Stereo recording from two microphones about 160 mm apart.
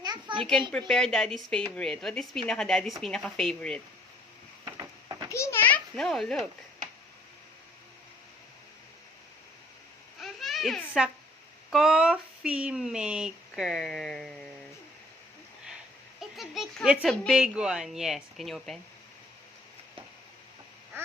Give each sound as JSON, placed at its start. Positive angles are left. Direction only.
{"t": 0.0, "sound": "a sound", "side_deg": -25}
{"t": 0.7, "sound": "speech", "side_deg": 5}
{"t": 4.6, "sound": "a sound", "side_deg": -20}
{"t": 5.3, "sound": "children playing", "side_deg": 20}
{"t": 10.2, "sound": "babbling", "side_deg": 0}
{"t": 11.7, "sound": "speech", "side_deg": 0}
{"t": 16.2, "sound": "speech", "side_deg": 0}